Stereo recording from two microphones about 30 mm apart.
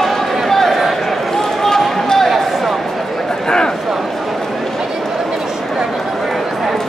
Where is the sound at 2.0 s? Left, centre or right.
Centre.